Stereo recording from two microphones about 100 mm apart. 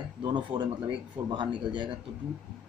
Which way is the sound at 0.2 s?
50° right (ahead or behind).